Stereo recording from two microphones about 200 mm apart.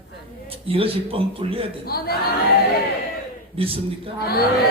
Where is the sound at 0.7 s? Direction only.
30° right (ahead or behind).